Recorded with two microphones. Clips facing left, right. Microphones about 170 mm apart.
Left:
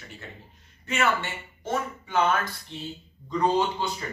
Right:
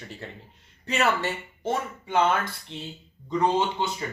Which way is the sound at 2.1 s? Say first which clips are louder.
Right 1 dB; 25° right (ahead or behind).